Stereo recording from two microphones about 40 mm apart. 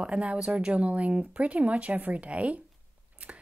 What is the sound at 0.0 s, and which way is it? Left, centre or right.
Speech, right.